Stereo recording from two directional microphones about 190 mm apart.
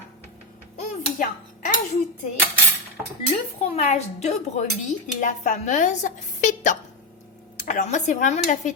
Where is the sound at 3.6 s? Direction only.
35° left (ahead or behind).